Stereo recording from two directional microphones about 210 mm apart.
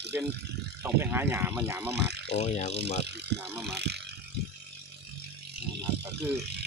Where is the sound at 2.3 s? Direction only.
35° left (ahead or behind).